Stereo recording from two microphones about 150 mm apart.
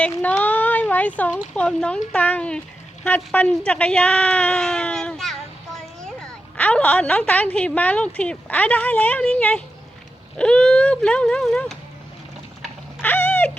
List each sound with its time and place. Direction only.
0.0 s speech: 10° left (ahead or behind)
13.0 s cat: 10° left (ahead or behind)